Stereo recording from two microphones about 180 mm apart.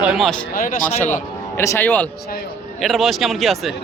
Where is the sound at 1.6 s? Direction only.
15° left (ahead or behind).